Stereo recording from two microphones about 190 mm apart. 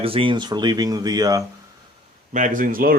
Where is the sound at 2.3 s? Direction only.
40° right (ahead or behind).